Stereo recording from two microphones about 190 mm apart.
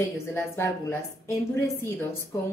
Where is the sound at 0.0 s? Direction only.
15° left (ahead or behind).